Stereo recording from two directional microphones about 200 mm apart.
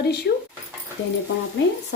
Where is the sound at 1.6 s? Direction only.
65° left (ahead or behind).